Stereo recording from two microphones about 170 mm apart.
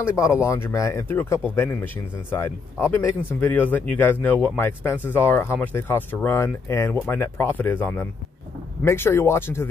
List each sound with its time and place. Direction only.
0.0 s speech: 15° left (ahead or behind)